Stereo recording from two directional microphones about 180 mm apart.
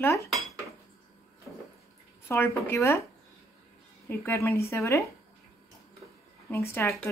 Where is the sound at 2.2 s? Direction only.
15° left (ahead or behind).